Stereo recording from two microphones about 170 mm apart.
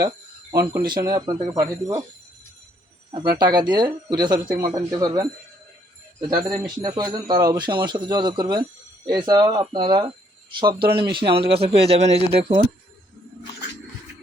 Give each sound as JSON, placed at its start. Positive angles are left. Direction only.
{"t": 0.9, "sound": "speech", "side_deg": -25}
{"t": 3.3, "sound": "speech", "side_deg": -25}
{"t": 10.8, "sound": "speech", "side_deg": -65}
{"t": 11.1, "sound": "speech", "side_deg": -30}